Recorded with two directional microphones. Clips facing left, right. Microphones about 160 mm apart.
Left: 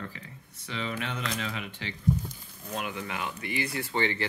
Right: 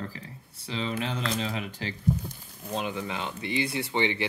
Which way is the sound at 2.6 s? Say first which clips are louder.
Right 3 dB; 25° right (ahead or behind).